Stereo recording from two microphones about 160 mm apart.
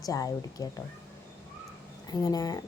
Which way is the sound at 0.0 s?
20° left (ahead or behind).